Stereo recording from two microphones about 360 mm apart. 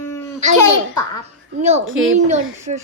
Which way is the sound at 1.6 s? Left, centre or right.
Centre.